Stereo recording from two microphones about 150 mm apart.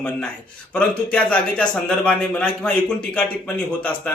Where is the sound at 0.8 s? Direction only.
10° left (ahead or behind).